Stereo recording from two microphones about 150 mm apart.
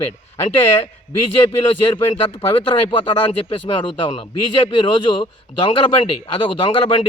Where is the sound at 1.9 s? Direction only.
30° left (ahead or behind).